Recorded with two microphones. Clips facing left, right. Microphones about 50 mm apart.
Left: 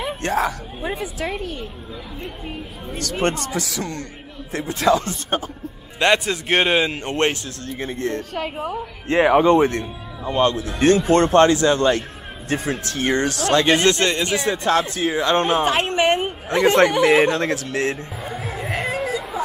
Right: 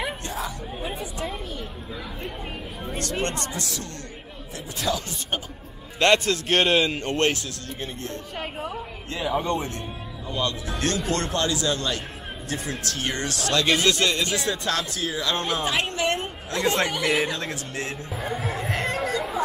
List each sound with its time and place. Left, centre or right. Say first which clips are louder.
0.2 s a sound: left 10 dB; left
1.2 s a woman's voice: left 6 dB; left
4.6 s speech: left 10 dB; left
5.9 s a man's voice: left 1 dB; centre
7.8 s speech: left 10 dB; left
9.4 s speech: left 12 dB; left
10.3 s speech: left 9 dB; left
10.8 s speech: left 11 dB; left
18.2 s chatter: right 2 dB; centre